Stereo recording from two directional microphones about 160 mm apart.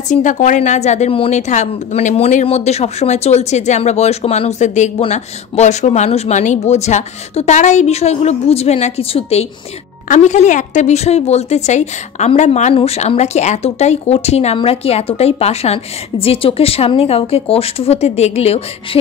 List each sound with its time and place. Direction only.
0.1 s a woman's voice: 50° left (ahead or behind)